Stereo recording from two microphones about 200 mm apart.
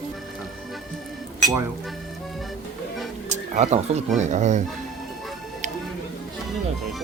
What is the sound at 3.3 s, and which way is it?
Speech, 35° right (ahead or behind).